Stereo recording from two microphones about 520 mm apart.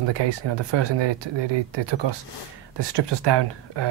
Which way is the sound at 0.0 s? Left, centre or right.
Right.